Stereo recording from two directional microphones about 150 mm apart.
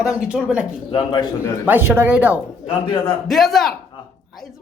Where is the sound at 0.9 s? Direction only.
30° left (ahead or behind).